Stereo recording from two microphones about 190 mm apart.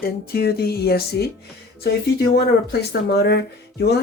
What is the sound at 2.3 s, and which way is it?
Speech, 55° left (ahead or behind).